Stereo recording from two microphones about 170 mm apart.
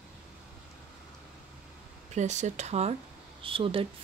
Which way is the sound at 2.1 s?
45° right (ahead or behind).